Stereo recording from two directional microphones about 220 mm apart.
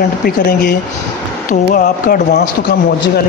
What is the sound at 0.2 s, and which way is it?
Speech, 45° left (ahead or behind).